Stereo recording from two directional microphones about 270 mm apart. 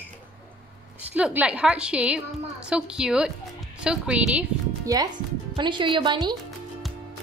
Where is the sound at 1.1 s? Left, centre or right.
Centre.